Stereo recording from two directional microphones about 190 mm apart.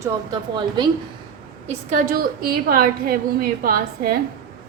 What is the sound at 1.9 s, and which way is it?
A woman's voice, 45° right (ahead or behind).